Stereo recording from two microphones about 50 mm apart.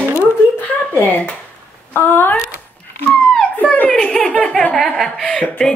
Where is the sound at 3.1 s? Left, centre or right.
Centre.